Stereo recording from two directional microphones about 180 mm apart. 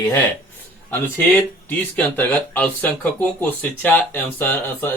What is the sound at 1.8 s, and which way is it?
Speech, 10° left (ahead or behind).